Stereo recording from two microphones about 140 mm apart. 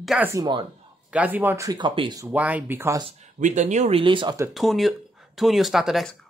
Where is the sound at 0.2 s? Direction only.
20° right (ahead or behind).